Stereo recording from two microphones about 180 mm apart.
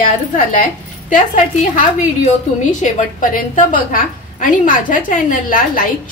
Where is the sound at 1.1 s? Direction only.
45° left (ahead or behind).